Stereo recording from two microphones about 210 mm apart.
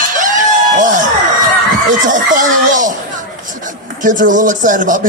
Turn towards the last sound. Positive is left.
turn(degrees=-40)  # may be behind; listen again after turning